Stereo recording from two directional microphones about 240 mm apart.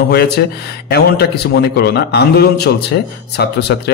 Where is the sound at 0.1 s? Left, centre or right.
Left.